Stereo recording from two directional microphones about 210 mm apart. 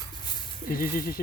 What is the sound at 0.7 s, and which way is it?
Speech, 45° left (ahead or behind).